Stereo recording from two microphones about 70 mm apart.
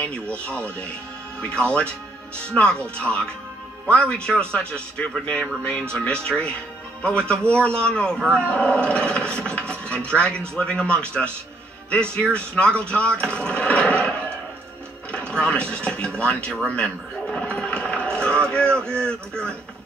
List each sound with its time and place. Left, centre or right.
0.0 s speech: centre
12.2 s speech: centre
16.6 s a sound: centre
18.5 s speech: centre